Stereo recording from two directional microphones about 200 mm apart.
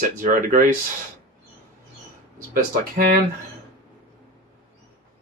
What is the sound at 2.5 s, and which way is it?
Speech, 45° right (ahead or behind).